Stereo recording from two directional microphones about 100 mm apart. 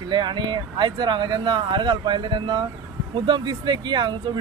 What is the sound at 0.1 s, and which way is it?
Speech, 50° right (ahead or behind).